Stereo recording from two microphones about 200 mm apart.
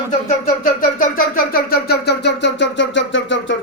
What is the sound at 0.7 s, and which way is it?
Speech, 45° left (ahead or behind).